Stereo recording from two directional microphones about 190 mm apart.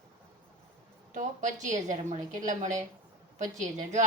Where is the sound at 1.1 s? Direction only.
40° right (ahead or behind).